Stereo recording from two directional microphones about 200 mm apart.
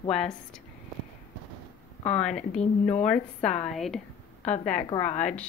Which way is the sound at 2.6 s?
35° left (ahead or behind).